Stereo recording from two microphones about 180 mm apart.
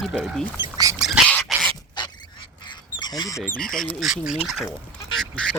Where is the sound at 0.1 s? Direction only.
Centre (ahead or behind).